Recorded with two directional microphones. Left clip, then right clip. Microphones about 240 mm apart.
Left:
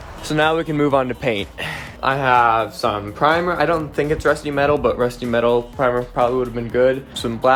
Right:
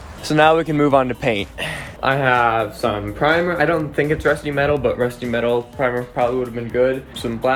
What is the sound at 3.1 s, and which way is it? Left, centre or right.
Speech, right.